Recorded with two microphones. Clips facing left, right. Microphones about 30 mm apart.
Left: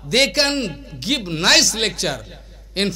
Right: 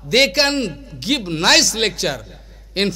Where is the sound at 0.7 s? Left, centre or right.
Left.